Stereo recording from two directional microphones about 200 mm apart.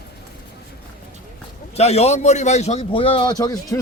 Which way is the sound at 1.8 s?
30° left (ahead or behind).